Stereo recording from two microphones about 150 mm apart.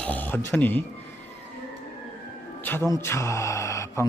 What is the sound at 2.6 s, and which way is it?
Music, 15° left (ahead or behind).